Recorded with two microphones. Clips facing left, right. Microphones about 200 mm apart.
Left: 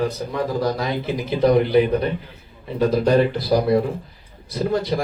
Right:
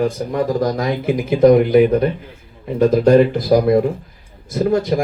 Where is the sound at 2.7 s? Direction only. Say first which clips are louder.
Right 6 dB; 45° right (ahead or behind).